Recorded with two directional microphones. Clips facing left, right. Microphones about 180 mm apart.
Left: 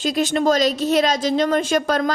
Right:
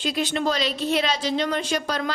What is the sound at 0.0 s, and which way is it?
Speech, 45° left (ahead or behind).